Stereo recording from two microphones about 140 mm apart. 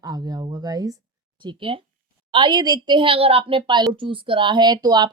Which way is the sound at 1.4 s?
35° right (ahead or behind).